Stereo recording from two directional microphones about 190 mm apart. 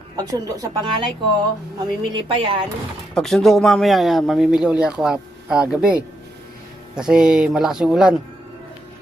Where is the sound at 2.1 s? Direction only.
25° right (ahead or behind).